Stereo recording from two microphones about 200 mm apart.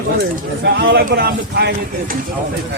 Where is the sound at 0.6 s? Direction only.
55° right (ahead or behind).